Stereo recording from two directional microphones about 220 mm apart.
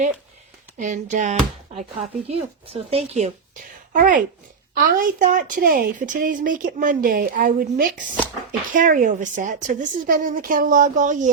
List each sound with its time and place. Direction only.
0.8 s speech: 35° right (ahead or behind)